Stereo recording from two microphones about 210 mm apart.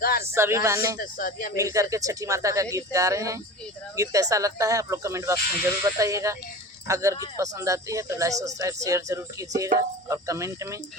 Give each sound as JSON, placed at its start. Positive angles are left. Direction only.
{"t": 0.0, "sound": "a sound", "side_deg": 45}
{"t": 0.3, "sound": "speech", "side_deg": -15}
{"t": 0.9, "sound": "speech", "side_deg": 40}
{"t": 1.5, "sound": "speech", "side_deg": -15}